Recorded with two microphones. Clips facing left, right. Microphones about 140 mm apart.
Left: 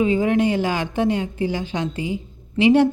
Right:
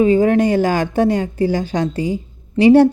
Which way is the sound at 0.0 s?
45° right (ahead or behind).